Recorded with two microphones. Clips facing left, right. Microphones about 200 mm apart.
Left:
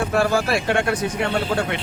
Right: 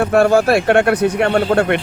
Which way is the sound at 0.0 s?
60° right (ahead or behind).